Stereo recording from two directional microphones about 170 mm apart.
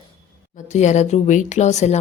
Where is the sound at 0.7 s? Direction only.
45° left (ahead or behind).